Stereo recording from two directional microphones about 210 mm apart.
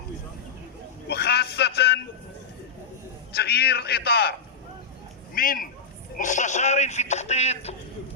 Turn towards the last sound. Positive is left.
turn(degrees=30)  # may be behind; listen again after turning